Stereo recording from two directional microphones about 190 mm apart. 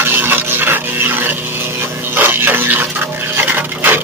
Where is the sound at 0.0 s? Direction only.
10° right (ahead or behind).